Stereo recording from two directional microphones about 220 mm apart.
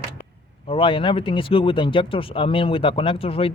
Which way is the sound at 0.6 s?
25° left (ahead or behind).